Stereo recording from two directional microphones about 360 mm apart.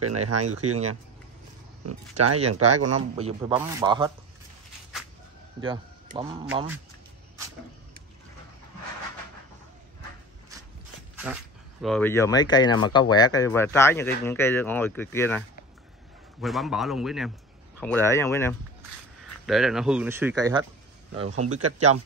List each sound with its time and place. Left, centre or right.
0.0 s speech: right
1.9 s speech: right
3.0 s a man's voice: centre
5.6 s a man's voice: centre
11.2 s speech: centre
21.2 s speech: right